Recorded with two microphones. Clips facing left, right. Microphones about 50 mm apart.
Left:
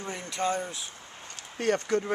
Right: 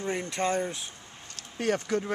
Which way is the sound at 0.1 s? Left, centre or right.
Right.